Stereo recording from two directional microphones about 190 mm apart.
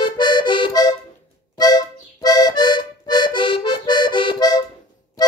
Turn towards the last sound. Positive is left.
turn(degrees=20)  # may be behind; listen again after turning